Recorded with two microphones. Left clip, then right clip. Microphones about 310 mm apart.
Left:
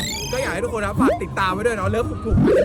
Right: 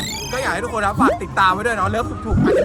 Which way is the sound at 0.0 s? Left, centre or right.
Centre.